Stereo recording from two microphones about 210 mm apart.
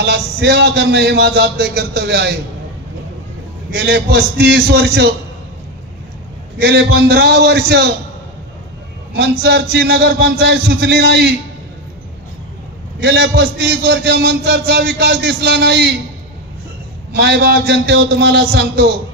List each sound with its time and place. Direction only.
0.0 s a man's voice: 50° right (ahead or behind)
3.7 s a man's voice: 50° right (ahead or behind)
6.6 s a man's voice: 50° right (ahead or behind)
9.1 s a man's voice: 50° right (ahead or behind)
13.0 s a man's voice: 50° right (ahead or behind)
17.1 s a man's voice: 50° right (ahead or behind)